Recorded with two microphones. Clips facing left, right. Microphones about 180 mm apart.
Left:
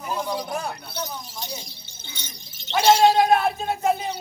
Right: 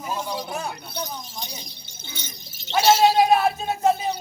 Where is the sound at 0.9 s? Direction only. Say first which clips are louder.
Even; 15° right (ahead or behind).